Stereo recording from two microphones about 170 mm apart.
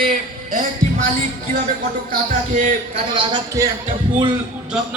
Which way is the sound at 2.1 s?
50° right (ahead or behind).